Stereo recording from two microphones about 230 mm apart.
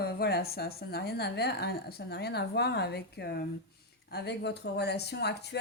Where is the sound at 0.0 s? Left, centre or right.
Left.